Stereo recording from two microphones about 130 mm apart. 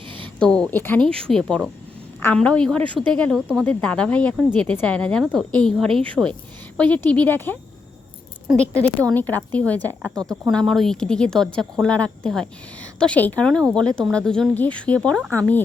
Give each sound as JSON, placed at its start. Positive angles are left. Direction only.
{"t": 0.3, "sound": "a woman's voice", "side_deg": 5}
{"t": 2.8, "sound": "speech", "side_deg": -40}
{"t": 3.2, "sound": "a woman's voice", "side_deg": 0}
{"t": 6.2, "sound": "a woman's voice", "side_deg": -5}
{"t": 6.7, "sound": "a woman's voice", "side_deg": 10}